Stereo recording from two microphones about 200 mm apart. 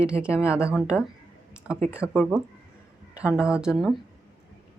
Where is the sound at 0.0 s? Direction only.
5° right (ahead or behind).